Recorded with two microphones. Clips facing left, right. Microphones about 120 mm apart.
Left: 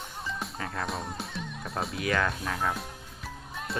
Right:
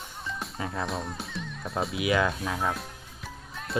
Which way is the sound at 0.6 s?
10° right (ahead or behind).